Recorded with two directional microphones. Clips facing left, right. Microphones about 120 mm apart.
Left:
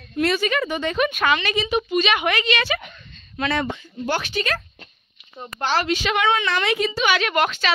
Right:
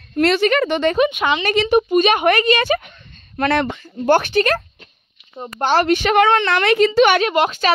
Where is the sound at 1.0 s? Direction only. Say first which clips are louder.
Right 3 dB; 20° right (ahead or behind).